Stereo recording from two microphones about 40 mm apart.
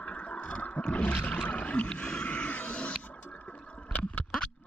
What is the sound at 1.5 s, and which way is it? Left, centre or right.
Music, left.